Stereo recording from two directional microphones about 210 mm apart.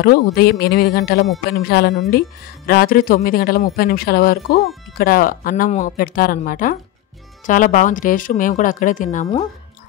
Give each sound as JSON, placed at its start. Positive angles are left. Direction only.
{"t": 0.0, "sound": "a woman's voice", "side_deg": 45}